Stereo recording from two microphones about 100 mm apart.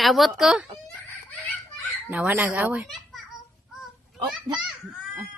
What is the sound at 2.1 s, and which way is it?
Speech, 15° right (ahead or behind).